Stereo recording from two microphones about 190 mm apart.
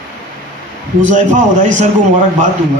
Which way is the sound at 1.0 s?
40° right (ahead or behind).